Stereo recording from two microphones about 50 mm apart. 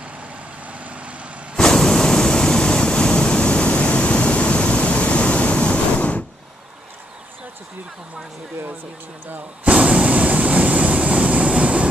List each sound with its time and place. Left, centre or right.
0.7 s vehicle: right
1.6 s waves: centre; by 6.2 s left
9.7 s vehicle: right